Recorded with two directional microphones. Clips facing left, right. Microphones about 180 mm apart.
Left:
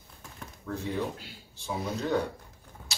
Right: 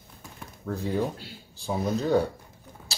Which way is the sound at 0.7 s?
40° right (ahead or behind).